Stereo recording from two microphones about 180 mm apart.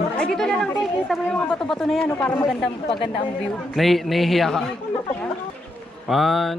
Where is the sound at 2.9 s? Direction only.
30° left (ahead or behind).